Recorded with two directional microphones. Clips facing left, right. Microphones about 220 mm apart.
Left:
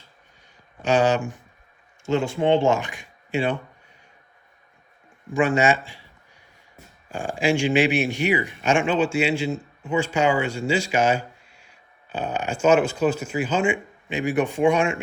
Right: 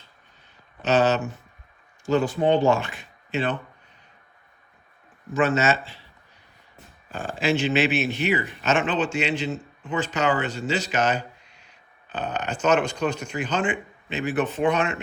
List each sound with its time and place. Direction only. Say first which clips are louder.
0.8 s speech: left 1 dB; 10° left (ahead or behind)
2.0 s speech: even; 25° left (ahead or behind)
5.3 s speech: left 2 dB; 15° left (ahead or behind)
7.1 s speech: left 2 dB; 15° left (ahead or behind)